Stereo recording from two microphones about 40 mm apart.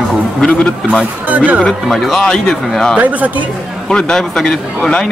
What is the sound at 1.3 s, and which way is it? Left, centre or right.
Speech, right.